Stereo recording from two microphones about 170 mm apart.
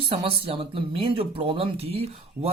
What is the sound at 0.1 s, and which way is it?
A man's voice, 35° right (ahead or behind).